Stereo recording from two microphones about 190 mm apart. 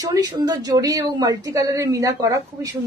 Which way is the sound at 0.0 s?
20° right (ahead or behind).